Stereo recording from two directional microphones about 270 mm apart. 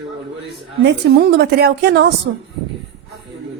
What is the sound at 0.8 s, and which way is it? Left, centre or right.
A woman's voice, right.